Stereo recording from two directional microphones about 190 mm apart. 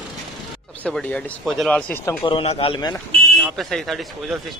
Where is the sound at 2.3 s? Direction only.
30° left (ahead or behind).